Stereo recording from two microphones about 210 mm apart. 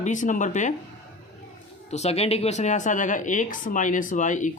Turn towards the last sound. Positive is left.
turn(degrees=35)  # may be behind; listen again after turning